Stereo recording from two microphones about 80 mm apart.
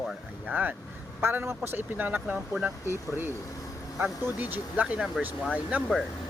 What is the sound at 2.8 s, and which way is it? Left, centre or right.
Speech, right.